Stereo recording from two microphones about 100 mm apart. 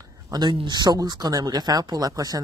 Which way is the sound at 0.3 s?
45° right (ahead or behind).